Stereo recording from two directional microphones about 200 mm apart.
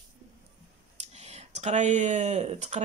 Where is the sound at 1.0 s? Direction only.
35° right (ahead or behind).